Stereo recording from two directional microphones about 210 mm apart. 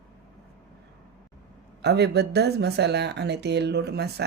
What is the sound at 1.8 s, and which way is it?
Speech, 50° right (ahead or behind).